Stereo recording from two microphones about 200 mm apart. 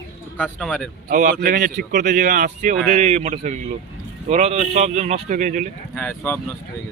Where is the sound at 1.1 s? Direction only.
40° right (ahead or behind).